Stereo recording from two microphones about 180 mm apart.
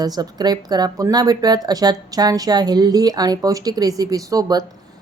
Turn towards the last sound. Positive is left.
turn(degrees=-20)  # may be behind; listen again after turning